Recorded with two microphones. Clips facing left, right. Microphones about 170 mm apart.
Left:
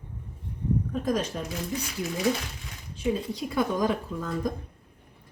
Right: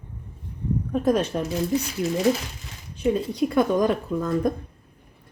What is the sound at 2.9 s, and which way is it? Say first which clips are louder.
Speech: right 5 dB; 65° right (ahead or behind).